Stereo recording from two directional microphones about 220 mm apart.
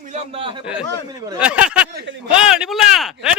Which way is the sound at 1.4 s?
5° right (ahead or behind).